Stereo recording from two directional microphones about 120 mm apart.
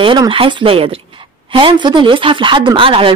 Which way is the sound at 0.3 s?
45° right (ahead or behind).